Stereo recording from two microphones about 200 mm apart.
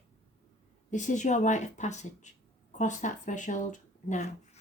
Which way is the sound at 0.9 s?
40° left (ahead or behind).